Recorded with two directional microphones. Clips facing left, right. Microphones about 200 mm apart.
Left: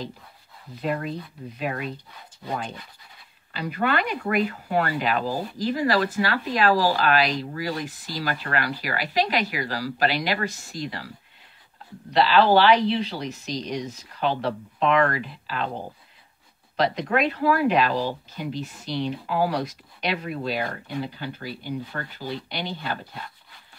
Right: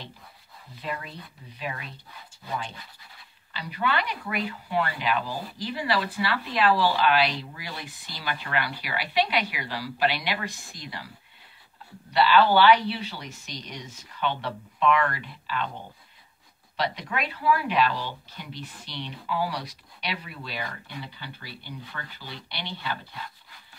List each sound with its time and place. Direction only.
0.7 s speech: 45° left (ahead or behind)
12.2 s speech: 35° left (ahead or behind)
13.5 s speech: 90° left
14.1 s speech: 35° left (ahead or behind)